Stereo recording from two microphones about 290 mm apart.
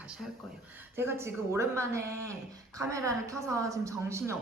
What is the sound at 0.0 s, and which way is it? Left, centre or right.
Speech, centre.